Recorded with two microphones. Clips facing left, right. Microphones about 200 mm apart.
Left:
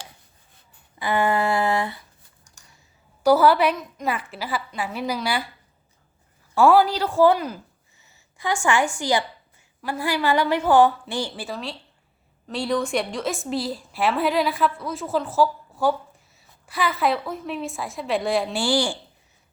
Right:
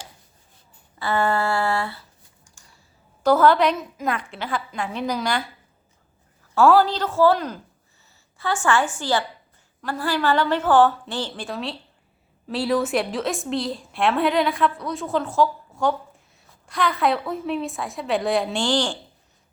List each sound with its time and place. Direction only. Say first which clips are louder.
0.9 s a woman's voice: even; 15° left (ahead or behind)
3.2 s a woman's voice: even; 10° left (ahead or behind)
6.5 s a woman's voice: even; 10° left (ahead or behind)